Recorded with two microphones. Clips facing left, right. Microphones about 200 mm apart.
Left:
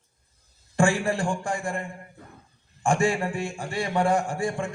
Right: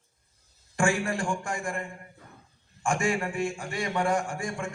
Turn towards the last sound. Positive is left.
turn(degrees=35)  # may be behind; listen again after turning